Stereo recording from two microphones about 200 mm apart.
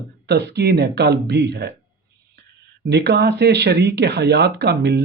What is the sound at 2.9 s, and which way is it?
Speech, 55° right (ahead or behind).